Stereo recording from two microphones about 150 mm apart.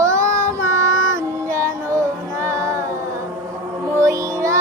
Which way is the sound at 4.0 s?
20° right (ahead or behind).